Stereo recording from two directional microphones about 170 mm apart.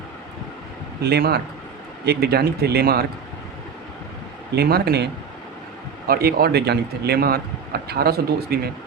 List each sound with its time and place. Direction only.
1.0 s speech: 70° right (ahead or behind)
4.5 s speech: 70° right (ahead or behind)
6.1 s speech: 65° right (ahead or behind)